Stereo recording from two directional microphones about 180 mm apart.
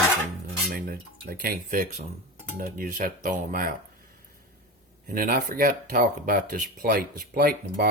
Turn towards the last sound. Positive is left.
turn(degrees=-55)  # may be behind; listen again after turning